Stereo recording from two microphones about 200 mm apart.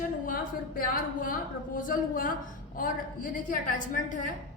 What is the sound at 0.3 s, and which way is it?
A woman's voice, 45° left (ahead or behind).